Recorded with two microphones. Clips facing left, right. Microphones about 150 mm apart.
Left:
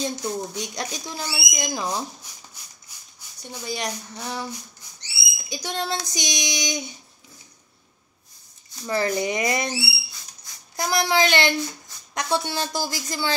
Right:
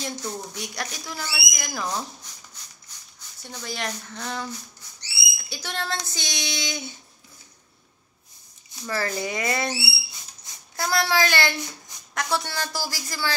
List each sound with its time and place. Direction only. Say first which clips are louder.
0.0 s speech: left 5 dB; 20° left (ahead or behind)
2.6 s maraca: even; 10° left (ahead or behind)
3.4 s speech: left 2 dB; 15° left (ahead or behind)
8.8 s speech: left 4 dB; 20° left (ahead or behind)